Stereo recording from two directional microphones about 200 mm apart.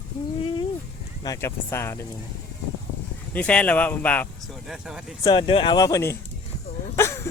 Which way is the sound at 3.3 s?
5° left (ahead or behind).